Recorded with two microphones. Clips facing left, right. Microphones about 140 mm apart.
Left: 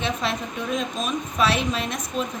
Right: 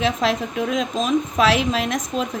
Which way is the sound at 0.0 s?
90° right.